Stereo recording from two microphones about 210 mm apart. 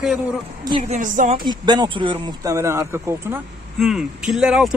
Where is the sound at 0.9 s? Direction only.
35° right (ahead or behind).